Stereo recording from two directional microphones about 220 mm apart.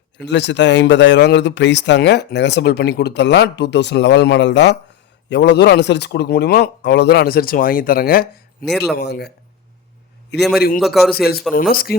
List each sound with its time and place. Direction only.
0.2 s a man's voice: 50° left (ahead or behind)
8.6 s a man's voice: centre (ahead or behind)
9.0 s a man's voice: 50° left (ahead or behind)
10.3 s a man's voice: 50° left (ahead or behind)
10.8 s a man's voice: centre (ahead or behind)
11.7 s speech: 40° left (ahead or behind)